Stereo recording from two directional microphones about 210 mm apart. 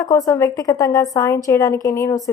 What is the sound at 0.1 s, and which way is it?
A woman's voice, 15° left (ahead or behind).